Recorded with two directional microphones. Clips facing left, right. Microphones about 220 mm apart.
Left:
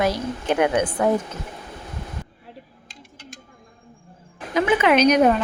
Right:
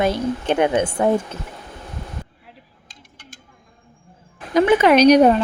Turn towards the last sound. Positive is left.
turn(degrees=-35)  # may be behind; listen again after turning